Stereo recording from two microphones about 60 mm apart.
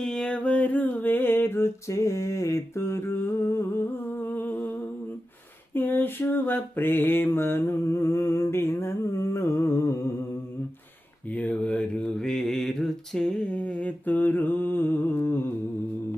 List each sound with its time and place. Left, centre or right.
0.0 s music: centre; by 4.8 s left
5.7 s mantra: left
11.3 s a sound: left
12.1 s mantra: centre; by 15.4 s left